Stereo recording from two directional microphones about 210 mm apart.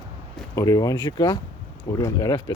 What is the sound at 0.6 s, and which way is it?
Speech, 15° left (ahead or behind).